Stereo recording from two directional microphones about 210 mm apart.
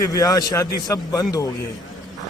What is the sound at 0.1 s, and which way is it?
A man's voice, 15° left (ahead or behind).